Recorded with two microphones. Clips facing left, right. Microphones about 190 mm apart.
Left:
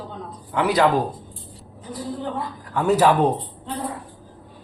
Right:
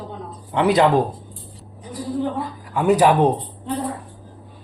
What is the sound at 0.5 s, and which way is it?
Speech, 25° right (ahead or behind).